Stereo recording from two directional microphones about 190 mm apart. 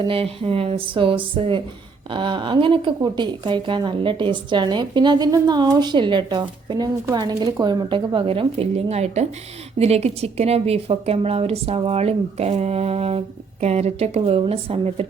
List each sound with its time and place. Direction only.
0.0 s a woman's voice: 30° right (ahead or behind)